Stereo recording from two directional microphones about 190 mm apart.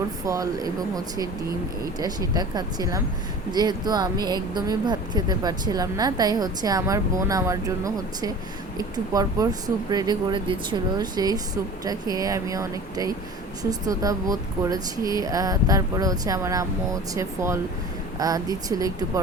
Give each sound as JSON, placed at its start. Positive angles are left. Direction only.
{"t": 0.3, "sound": "speech", "side_deg": -20}